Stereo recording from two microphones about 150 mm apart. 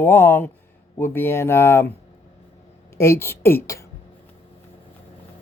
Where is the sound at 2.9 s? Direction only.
15° left (ahead or behind).